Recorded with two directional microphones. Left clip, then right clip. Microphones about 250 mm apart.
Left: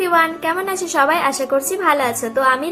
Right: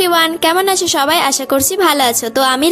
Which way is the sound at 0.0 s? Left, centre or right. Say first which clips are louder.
Right 4 dB; right.